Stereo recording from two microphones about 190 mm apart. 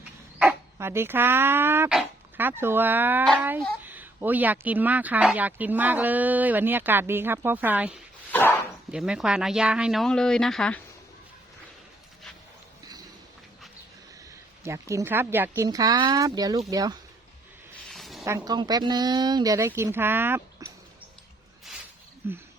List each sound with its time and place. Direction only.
0.3 s speech: 10° right (ahead or behind)
8.3 s dog: 10° left (ahead or behind)
8.9 s speech: 5° right (ahead or behind)
14.6 s speech: 15° right (ahead or behind)
17.9 s a sound: centre (ahead or behind)
18.3 s speech: 20° right (ahead or behind)
22.2 s speech: 10° right (ahead or behind)